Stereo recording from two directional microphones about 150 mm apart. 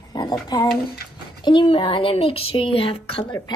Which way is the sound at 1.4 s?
35° left (ahead or behind).